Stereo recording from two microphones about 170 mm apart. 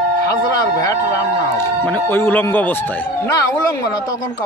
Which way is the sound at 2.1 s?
10° left (ahead or behind).